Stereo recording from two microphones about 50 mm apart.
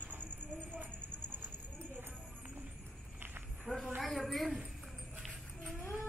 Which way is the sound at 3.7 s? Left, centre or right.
Centre.